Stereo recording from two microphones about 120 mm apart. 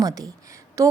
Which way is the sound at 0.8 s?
25° right (ahead or behind).